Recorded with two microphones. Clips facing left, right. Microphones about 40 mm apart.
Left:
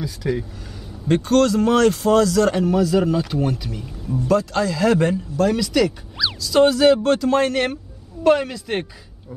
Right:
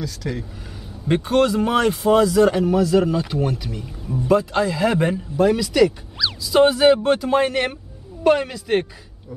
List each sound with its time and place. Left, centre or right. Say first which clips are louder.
0.0 s speech: left 4 dB; centre
1.0 s speech: left 1 dB; centre
2.5 s speech: right 1 dB; centre
4.3 s speech: right 1 dB; centre